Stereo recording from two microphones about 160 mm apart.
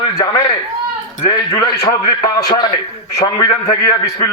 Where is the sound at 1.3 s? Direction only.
25° left (ahead or behind).